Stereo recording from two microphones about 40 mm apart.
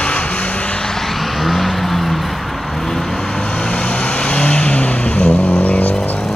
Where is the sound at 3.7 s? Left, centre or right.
Left.